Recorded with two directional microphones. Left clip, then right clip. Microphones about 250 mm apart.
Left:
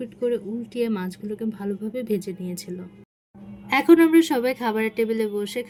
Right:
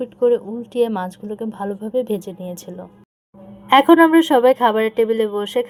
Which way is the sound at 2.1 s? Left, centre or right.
Right.